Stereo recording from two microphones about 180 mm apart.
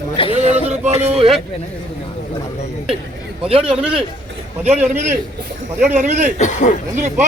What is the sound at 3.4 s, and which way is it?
Speech, 30° right (ahead or behind).